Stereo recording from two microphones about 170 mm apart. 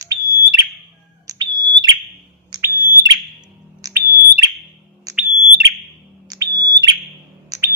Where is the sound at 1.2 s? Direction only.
25° right (ahead or behind).